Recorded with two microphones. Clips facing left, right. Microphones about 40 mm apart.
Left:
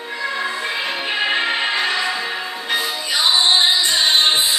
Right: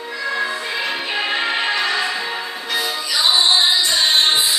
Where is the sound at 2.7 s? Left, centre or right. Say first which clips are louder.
Left 1 dB; left.